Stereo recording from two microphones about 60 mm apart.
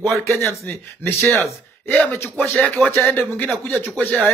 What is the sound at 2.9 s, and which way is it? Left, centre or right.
Speech, left.